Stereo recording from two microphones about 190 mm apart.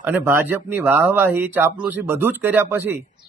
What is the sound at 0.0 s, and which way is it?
Speech, 10° right (ahead or behind).